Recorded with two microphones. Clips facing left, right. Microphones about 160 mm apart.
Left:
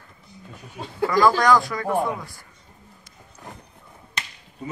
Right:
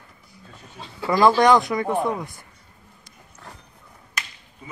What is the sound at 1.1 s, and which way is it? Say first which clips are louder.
Speech: right 2 dB; 25° right (ahead or behind).